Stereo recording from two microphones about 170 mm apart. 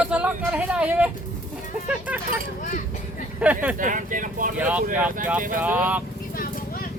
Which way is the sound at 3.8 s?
50° right (ahead or behind).